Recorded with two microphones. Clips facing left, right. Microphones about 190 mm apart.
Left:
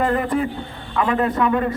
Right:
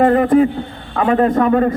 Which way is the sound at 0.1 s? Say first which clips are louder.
Right 9 dB; 40° right (ahead or behind).